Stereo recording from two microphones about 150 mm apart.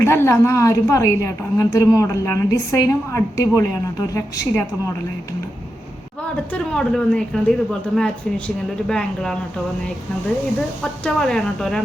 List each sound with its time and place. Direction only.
0.0 s a woman's voice: 15° left (ahead or behind)
6.5 s a woman's voice: 5° left (ahead or behind)
11.0 s a woman's voice: 5° left (ahead or behind)